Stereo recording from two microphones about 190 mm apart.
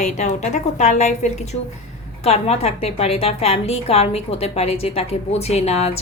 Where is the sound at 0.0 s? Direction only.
40° left (ahead or behind).